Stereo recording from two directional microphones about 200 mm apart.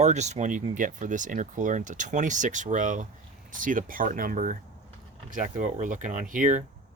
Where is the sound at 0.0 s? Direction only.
35° right (ahead or behind).